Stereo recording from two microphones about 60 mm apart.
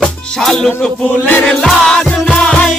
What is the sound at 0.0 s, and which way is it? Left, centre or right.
Music, centre.